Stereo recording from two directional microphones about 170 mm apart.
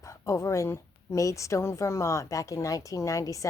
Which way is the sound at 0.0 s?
20° left (ahead or behind).